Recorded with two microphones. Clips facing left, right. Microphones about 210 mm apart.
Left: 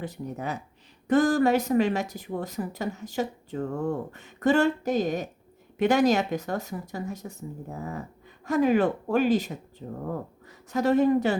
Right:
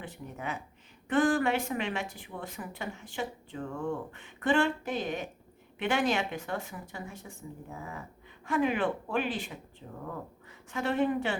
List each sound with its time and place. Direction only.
0.0 s speech: 40° left (ahead or behind)